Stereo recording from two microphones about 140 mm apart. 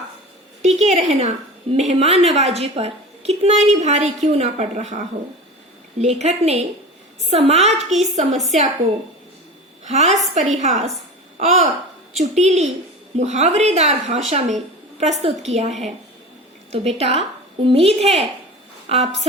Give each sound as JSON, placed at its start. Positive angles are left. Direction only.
{"t": 0.6, "sound": "a woman's voice", "side_deg": -55}
{"t": 9.8, "sound": "a woman's voice", "side_deg": -55}
{"t": 16.7, "sound": "a woman's voice", "side_deg": -50}